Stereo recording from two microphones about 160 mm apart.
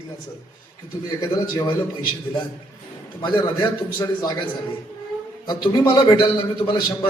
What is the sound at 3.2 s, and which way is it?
A man's voice, 25° left (ahead or behind).